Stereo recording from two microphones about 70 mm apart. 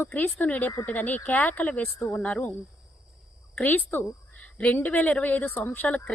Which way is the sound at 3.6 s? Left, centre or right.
Left.